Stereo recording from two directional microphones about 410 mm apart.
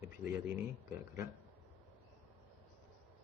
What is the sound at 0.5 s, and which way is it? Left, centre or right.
Speech, centre.